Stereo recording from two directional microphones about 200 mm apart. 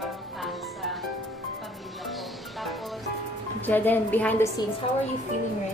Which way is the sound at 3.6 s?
10° left (ahead or behind).